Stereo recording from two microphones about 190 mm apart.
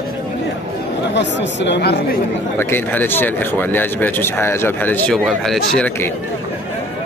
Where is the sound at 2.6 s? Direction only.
10° left (ahead or behind).